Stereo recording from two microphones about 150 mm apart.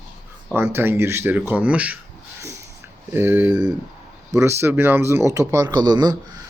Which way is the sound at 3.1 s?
15° right (ahead or behind).